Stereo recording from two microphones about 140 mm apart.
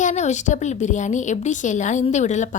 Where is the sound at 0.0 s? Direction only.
60° left (ahead or behind).